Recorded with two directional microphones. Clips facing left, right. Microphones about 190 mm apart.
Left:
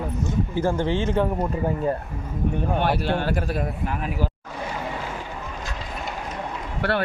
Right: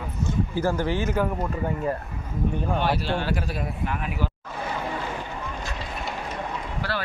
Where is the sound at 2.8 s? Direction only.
55° left (ahead or behind).